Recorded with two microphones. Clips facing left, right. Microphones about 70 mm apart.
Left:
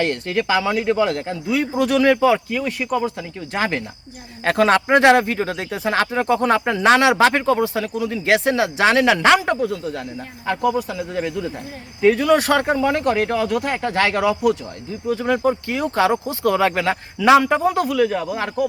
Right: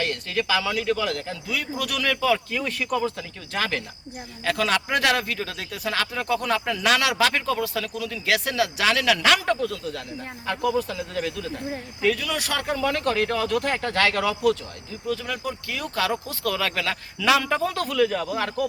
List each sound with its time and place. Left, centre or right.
0.0 s speech: left
2.5 s speech: centre
4.4 s speech: left
10.7 s speech: centre
15.0 s speech: left